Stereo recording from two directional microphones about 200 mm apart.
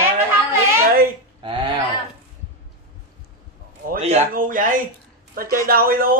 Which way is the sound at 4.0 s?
40° right (ahead or behind).